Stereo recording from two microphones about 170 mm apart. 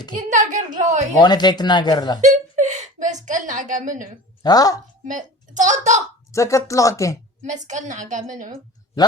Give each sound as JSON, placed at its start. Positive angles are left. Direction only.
{"t": 0.2, "sound": "a woman's voice", "side_deg": -45}
{"t": 1.2, "sound": "speech", "side_deg": 25}
{"t": 2.2, "sound": "a sound", "side_deg": -45}
{"t": 4.4, "sound": "speech", "side_deg": 20}
{"t": 5.0, "sound": "a child's voice", "side_deg": -50}
{"t": 6.3, "sound": "speech", "side_deg": 20}
{"t": 7.4, "sound": "a woman's voice", "side_deg": -45}